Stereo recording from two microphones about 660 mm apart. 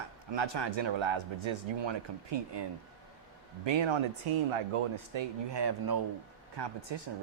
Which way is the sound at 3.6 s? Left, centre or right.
Right.